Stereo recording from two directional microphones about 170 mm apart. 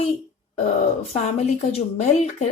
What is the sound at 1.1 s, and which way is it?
A woman's voice, 40° left (ahead or behind).